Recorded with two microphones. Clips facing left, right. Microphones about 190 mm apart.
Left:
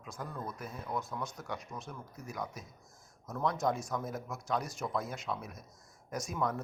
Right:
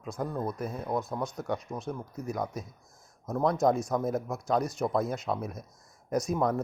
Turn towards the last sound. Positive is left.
turn(degrees=-40)  # may be behind; listen again after turning